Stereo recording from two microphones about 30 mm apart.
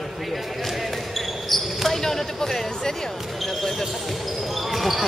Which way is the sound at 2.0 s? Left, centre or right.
Centre.